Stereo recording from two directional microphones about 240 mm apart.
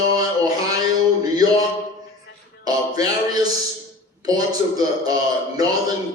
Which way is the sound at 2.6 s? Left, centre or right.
Centre.